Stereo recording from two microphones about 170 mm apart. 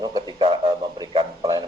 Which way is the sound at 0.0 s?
25° right (ahead or behind).